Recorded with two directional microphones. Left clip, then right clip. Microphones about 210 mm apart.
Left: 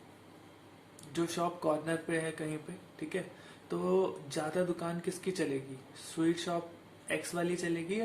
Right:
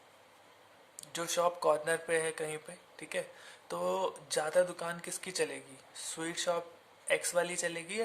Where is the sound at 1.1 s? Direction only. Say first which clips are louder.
Right 2 dB; 45° right (ahead or behind).